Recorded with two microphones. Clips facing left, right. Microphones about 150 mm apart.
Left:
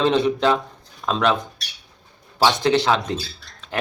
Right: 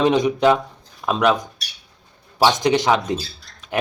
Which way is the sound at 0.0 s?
15° right (ahead or behind).